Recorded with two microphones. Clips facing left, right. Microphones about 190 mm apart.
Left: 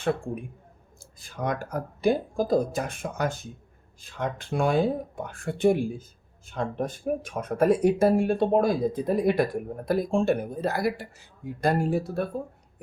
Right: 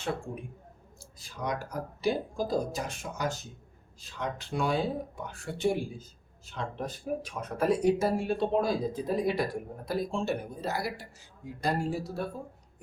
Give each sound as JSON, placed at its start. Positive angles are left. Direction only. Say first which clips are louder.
{"t": 1.2, "sound": "speech", "louder": "left 4 dB", "side_deg": 55}